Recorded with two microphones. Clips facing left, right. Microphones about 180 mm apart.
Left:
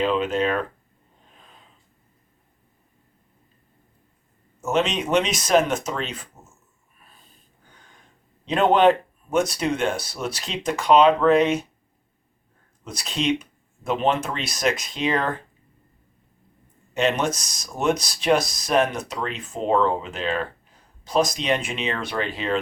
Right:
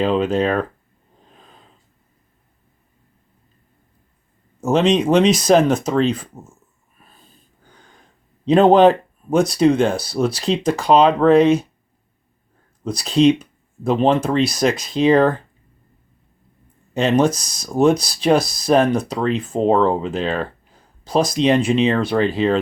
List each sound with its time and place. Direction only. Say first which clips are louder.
0.0 s speech: right 4 dB; 35° right (ahead or behind)
4.6 s speech: right 7 dB; 35° right (ahead or behind)
8.4 s speech: right 6 dB; 35° right (ahead or behind)
12.8 s speech: right 12 dB; 35° right (ahead or behind)
16.9 s speech: right 6 dB; 35° right (ahead or behind)